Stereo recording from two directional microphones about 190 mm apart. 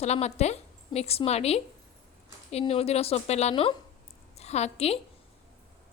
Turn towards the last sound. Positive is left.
turn(degrees=35)  # may be behind; listen again after turning